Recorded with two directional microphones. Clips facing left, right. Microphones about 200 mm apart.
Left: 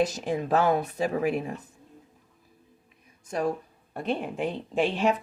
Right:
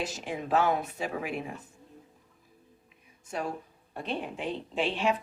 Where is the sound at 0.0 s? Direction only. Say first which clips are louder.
Left 8 dB; 40° left (ahead or behind).